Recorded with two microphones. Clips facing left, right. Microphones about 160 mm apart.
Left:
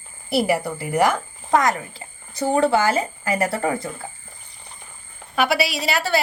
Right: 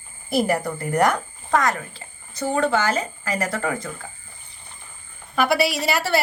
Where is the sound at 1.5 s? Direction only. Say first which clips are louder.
Left 2 dB; 20° left (ahead or behind).